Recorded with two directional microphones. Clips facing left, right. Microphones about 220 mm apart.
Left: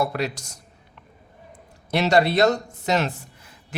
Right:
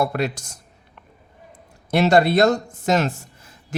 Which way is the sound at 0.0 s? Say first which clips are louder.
Right 2 dB; 50° right (ahead or behind).